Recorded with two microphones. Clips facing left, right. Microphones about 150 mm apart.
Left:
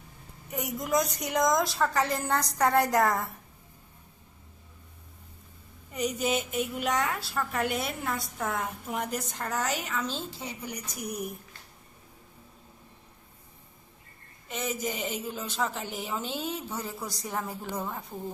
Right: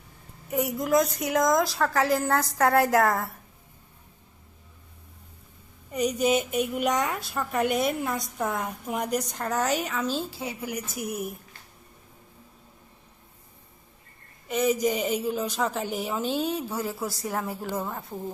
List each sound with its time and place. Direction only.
0.5 s a woman's voice: centre (ahead or behind)
5.9 s a woman's voice: 15° right (ahead or behind)
14.6 s a woman's voice: 15° right (ahead or behind)